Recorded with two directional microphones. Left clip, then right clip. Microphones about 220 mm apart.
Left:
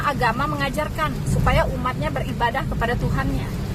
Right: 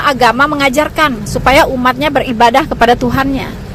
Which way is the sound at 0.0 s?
35° right (ahead or behind).